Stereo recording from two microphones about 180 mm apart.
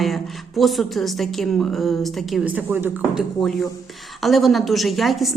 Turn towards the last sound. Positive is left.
turn(degrees=0)  # may be behind; listen again after turning